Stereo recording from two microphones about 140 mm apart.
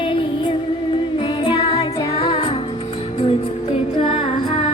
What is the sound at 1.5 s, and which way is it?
Music, 45° left (ahead or behind).